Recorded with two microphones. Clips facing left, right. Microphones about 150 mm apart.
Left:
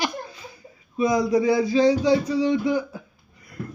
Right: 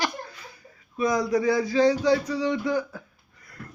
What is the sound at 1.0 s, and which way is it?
A man's voice, 10° left (ahead or behind).